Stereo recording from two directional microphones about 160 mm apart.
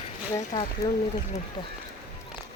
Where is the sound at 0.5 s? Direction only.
45° left (ahead or behind).